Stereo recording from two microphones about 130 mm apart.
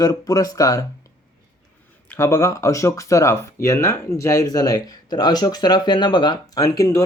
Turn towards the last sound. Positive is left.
turn(degrees=25)  # may be behind; listen again after turning